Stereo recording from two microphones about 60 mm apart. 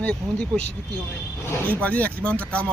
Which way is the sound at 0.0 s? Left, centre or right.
Centre.